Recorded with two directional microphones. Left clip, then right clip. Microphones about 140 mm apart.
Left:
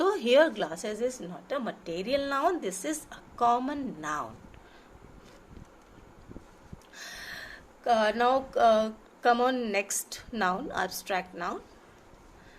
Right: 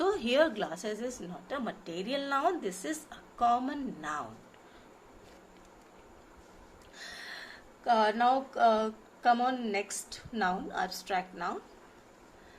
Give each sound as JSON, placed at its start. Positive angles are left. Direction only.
{"t": 0.0, "sound": "a woman's voice", "side_deg": 45}
{"t": 6.9, "sound": "speech", "side_deg": 50}